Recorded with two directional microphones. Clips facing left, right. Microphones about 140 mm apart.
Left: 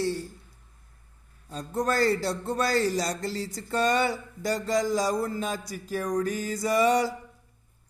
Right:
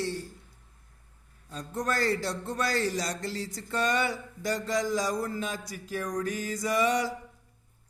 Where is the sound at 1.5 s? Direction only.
30° left (ahead or behind).